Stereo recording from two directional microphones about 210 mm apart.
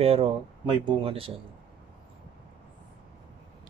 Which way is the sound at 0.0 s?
30° right (ahead or behind).